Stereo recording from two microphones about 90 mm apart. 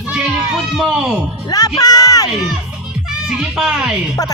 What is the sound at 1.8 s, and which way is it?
Speech, 45° left (ahead or behind).